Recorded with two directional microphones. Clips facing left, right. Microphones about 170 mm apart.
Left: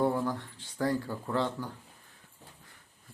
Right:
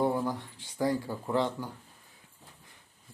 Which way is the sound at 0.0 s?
15° right (ahead or behind).